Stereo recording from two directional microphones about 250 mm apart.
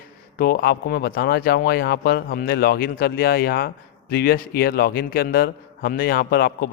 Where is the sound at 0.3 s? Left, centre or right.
Left.